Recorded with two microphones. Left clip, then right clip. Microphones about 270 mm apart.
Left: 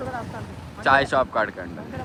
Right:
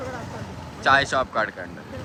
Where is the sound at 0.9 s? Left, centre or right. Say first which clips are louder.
Left 1 dB; centre.